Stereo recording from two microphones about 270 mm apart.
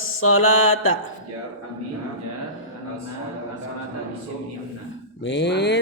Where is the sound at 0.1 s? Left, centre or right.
Left.